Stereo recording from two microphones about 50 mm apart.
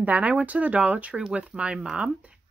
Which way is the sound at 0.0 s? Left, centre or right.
Right.